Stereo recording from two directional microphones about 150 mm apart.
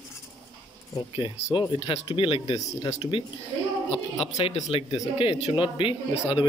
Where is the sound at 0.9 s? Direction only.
35° left (ahead or behind).